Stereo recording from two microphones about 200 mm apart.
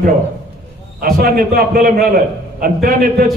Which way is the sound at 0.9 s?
50° right (ahead or behind).